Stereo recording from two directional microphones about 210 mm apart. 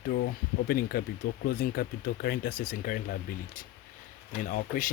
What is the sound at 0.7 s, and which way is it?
Speech, 45° left (ahead or behind).